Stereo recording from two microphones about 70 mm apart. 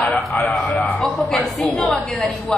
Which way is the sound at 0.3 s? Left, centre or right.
Centre.